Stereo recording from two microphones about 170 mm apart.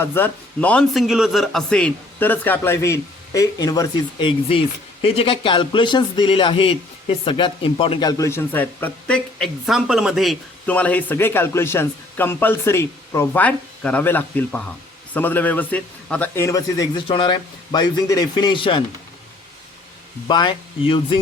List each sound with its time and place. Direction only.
0.0 s a man's voice: 10° left (ahead or behind); by 18.8 s 30° left (ahead or behind)
20.2 s a man's voice: 25° left (ahead or behind)